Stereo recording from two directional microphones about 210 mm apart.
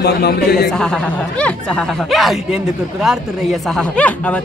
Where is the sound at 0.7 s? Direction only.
5° left (ahead or behind).